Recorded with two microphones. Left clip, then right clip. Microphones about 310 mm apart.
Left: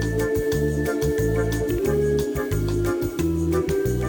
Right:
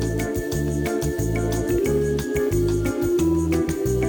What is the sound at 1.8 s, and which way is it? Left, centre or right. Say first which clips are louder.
Music: left 1 dB; centre.